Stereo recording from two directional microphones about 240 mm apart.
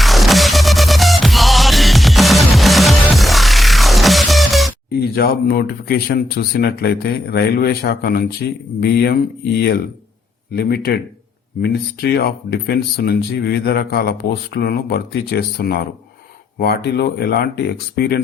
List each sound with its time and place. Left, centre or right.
0.0 s music: centre
5.1 s speech: left